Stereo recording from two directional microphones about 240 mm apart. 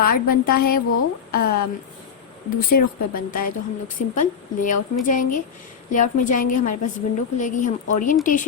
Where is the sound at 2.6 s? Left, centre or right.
Left.